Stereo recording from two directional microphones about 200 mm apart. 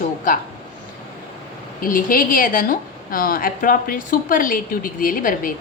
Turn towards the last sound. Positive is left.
turn(degrees=45)  # may be behind; listen again after turning